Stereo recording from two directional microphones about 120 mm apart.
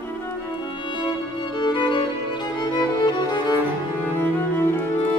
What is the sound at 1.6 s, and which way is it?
Music, 40° left (ahead or behind).